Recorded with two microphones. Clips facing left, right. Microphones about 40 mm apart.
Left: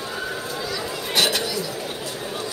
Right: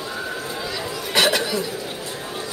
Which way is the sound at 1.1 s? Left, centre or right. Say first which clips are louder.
Right 3 dB; right.